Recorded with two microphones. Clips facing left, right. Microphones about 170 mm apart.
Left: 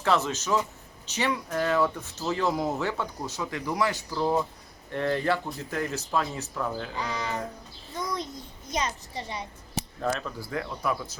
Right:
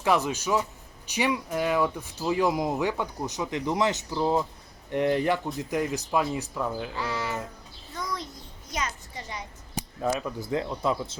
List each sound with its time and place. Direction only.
0.0 s speech: 15° right (ahead or behind)
6.9 s speech: 20° left (ahead or behind)
7.9 s a sound: 20° left (ahead or behind)
8.7 s a child's voice: 30° left (ahead or behind)
10.0 s speech: 10° right (ahead or behind)